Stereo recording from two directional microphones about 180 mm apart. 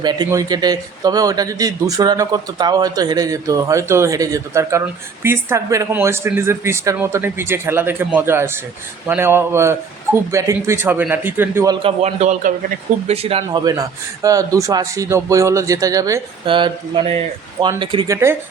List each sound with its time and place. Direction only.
0.0 s speech: 25° right (ahead or behind)
11.8 s speech: 35° right (ahead or behind)
13.2 s speech: 30° right (ahead or behind)
18.1 s speech: 15° right (ahead or behind)